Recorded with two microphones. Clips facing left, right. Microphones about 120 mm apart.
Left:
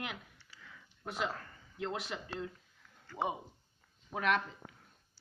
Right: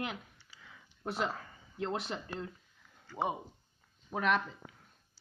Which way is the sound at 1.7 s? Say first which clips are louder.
Right 3 dB; 35° right (ahead or behind).